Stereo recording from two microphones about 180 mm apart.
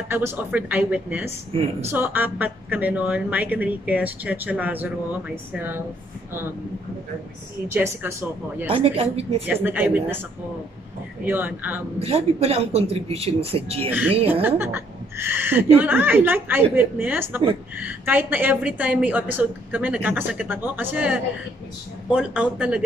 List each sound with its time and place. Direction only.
0.1 s a woman's voice: 10° right (ahead or behind)
7.6 s a woman's voice: 15° right (ahead or behind)
8.6 s speech: 35° right (ahead or behind)
9.5 s a woman's voice: 10° right (ahead or behind)
11.2 s a woman's voice: 10° right (ahead or behind)
12.0 s speech: 35° right (ahead or behind)
14.4 s a woman's voice: 15° right (ahead or behind)